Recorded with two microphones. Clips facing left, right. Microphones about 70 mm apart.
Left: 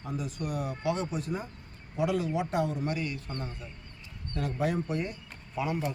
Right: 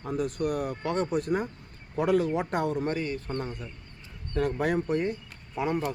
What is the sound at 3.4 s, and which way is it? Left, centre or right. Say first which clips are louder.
A man's voice: right 5 dB; right.